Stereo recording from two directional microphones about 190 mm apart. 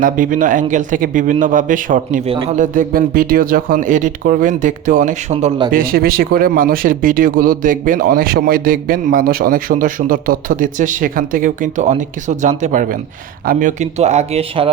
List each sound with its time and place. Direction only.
0.0 s a man's voice: 45° right (ahead or behind)
2.2 s a man's voice: 35° right (ahead or behind)
5.7 s a man's voice: 50° right (ahead or behind); by 14.7 s 30° right (ahead or behind)